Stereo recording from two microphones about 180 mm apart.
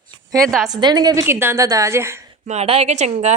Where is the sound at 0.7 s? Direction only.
25° right (ahead or behind).